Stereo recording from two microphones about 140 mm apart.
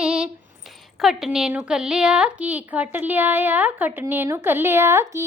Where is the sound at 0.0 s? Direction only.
5° right (ahead or behind).